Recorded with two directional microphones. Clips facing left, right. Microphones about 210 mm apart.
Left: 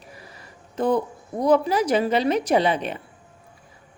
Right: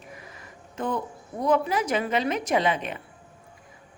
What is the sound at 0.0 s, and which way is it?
Speech, 35° left (ahead or behind).